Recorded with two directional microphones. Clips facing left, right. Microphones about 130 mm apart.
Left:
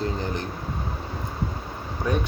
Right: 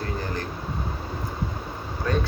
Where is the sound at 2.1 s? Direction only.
15° left (ahead or behind).